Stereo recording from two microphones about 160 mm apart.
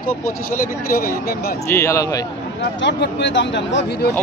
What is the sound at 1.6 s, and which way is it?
Speech, 15° left (ahead or behind).